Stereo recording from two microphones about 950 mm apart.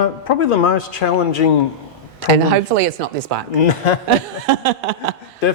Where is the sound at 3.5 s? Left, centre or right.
Left.